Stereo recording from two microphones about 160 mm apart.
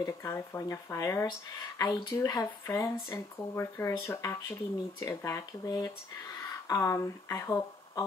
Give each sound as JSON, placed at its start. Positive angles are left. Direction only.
{"t": 0.0, "sound": "speech", "side_deg": 20}